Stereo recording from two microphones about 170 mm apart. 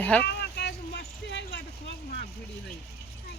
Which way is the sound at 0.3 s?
75° left (ahead or behind).